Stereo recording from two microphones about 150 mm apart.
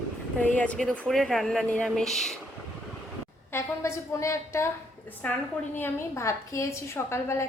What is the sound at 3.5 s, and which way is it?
A woman's voice, 20° left (ahead or behind).